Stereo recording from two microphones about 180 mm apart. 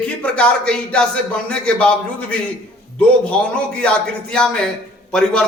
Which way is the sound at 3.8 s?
5° left (ahead or behind).